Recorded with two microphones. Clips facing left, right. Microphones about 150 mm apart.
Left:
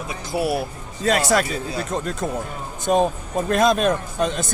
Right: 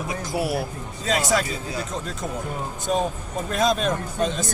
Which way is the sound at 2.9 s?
50° left (ahead or behind).